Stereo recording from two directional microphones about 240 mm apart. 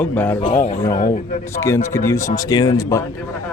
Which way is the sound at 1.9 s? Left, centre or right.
Centre.